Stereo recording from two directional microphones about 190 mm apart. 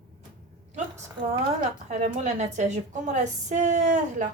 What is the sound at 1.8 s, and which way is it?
A woman's voice, 35° right (ahead or behind).